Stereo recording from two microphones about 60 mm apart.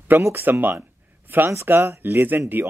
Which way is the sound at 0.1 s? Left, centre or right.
Right.